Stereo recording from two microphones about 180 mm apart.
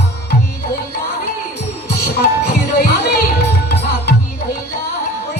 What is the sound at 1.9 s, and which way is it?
Music, 60° left (ahead or behind).